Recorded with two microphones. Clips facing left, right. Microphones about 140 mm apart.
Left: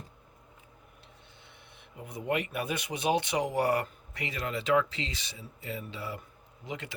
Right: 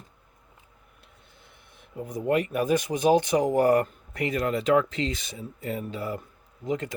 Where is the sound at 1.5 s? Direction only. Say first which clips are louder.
Even; 45° right (ahead or behind).